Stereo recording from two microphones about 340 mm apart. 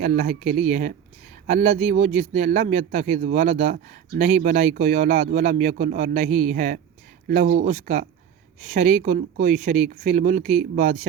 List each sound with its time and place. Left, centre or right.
0.0 s speech: right